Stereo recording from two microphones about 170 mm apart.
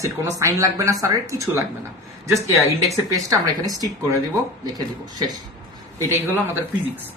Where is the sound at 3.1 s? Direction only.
20° right (ahead or behind).